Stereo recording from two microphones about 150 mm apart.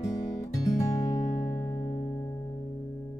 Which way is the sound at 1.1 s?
55° left (ahead or behind).